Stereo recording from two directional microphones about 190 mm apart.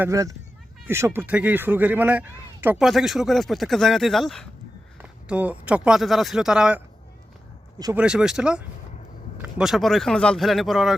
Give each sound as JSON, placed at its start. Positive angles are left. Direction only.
{"t": 0.0, "sound": "speech", "side_deg": -15}
{"t": 7.9, "sound": "speech", "side_deg": -5}